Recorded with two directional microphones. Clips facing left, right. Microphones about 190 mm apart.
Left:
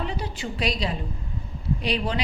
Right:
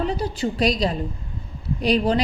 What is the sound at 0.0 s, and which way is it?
A woman's voice, 40° right (ahead or behind).